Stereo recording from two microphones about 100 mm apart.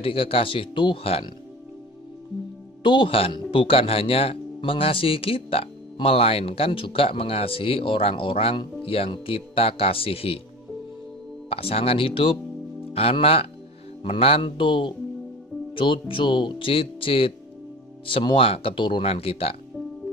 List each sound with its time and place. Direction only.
0.0 s speech: 65° left (ahead or behind)
2.8 s speech: 55° left (ahead or behind); by 10.4 s 70° left (ahead or behind)
11.4 s speech: 75° left (ahead or behind)
12.9 s speech: 70° left (ahead or behind)
19.0 s speech: 75° left (ahead or behind)